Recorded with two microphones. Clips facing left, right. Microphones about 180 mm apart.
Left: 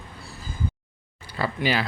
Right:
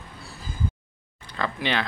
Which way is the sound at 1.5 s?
5° left (ahead or behind).